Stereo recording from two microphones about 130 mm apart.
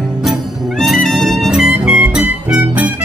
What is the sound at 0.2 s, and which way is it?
Music, centre (ahead or behind).